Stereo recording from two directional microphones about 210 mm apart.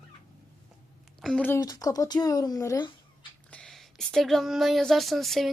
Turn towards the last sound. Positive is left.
turn(degrees=0)  # may be behind; listen again after turning